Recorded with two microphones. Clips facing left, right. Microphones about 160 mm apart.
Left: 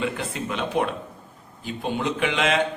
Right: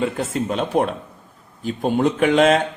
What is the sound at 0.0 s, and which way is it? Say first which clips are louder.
Speech: right 6 dB; 40° right (ahead or behind).